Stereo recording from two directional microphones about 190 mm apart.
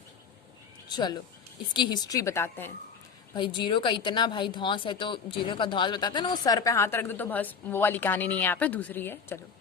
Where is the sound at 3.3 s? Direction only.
25° left (ahead or behind).